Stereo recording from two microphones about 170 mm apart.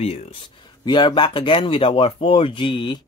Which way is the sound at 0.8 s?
25° left (ahead or behind).